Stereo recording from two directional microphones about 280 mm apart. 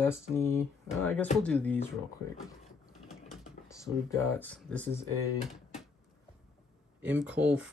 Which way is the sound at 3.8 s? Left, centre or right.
Centre.